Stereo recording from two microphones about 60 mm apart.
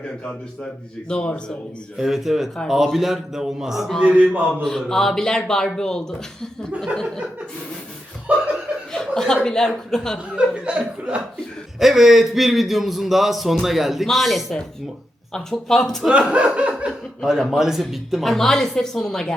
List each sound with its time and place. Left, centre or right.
0.3 s speech: centre
2.0 s a man's voice: centre
4.0 s a man's voice: right
4.6 s speech: centre
8.3 s chuckle: right
8.9 s chuckle: centre
9.4 s speech: centre
10.3 s speech: centre
11.8 s a man's voice: centre
16.0 s laughter: centre
17.2 s a man's voice: centre